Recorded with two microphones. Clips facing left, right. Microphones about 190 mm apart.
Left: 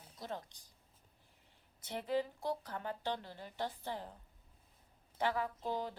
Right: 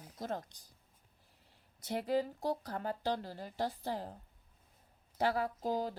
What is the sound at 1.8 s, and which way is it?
Speech, 40° right (ahead or behind).